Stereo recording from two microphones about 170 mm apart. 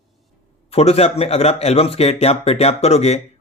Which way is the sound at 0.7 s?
35° left (ahead or behind).